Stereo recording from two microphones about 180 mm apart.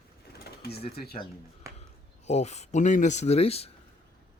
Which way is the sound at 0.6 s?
60° left (ahead or behind).